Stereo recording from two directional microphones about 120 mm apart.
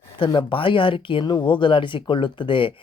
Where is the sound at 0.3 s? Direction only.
45° left (ahead or behind).